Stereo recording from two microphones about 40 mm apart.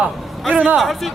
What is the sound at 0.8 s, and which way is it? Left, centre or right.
Speech, centre.